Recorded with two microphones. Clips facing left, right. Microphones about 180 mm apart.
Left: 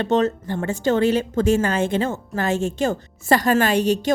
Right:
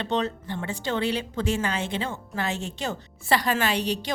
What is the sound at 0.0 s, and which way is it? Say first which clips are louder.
A woman's voice: left 8 dB; 45° left (ahead or behind).